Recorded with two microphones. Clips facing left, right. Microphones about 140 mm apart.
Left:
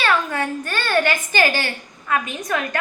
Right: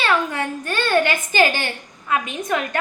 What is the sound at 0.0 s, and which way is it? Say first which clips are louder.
A woman's voice: even; 20° right (ahead or behind).